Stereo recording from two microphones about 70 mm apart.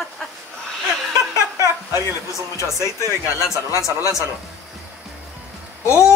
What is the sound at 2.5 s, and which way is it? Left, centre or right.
Speech, left.